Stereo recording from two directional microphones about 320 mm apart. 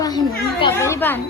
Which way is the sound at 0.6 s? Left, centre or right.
Centre.